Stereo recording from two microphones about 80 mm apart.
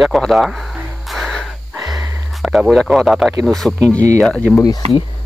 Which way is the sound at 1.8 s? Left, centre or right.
Right.